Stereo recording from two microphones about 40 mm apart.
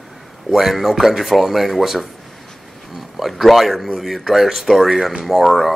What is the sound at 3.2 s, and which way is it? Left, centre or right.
Speech, centre.